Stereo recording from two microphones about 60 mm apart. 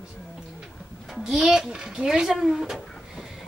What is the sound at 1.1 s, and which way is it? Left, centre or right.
A child's voice, centre.